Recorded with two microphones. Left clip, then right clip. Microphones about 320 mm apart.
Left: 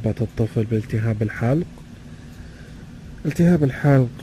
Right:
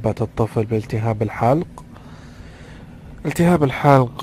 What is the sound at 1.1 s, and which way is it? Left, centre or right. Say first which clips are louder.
Mantra: right 7 dB; right.